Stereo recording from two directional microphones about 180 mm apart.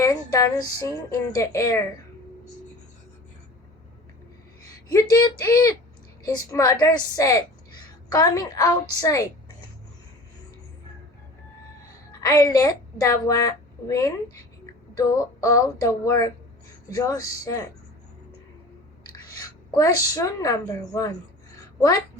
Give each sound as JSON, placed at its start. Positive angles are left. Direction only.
{"t": 0.0, "sound": "speech", "side_deg": 20}
{"t": 4.9, "sound": "a woman's voice", "side_deg": 20}
{"t": 12.2, "sound": "a woman's voice", "side_deg": 20}
{"t": 19.7, "sound": "speech", "side_deg": 20}